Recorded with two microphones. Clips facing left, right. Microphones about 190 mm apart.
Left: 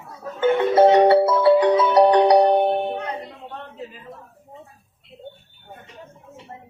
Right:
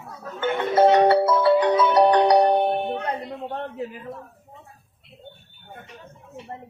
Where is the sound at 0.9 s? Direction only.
25° left (ahead or behind).